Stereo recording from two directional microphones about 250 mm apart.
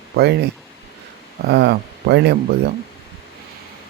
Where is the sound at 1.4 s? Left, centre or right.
Right.